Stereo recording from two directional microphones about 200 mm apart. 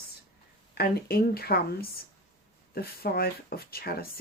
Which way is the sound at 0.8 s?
50° left (ahead or behind).